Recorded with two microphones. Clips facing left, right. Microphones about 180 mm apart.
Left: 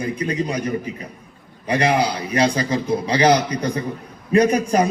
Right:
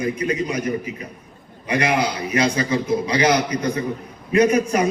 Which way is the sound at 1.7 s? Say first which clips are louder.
Left 2 dB; 30° left (ahead or behind).